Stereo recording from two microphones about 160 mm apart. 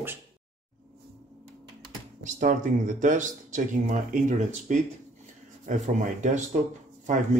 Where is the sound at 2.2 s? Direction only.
55° right (ahead or behind).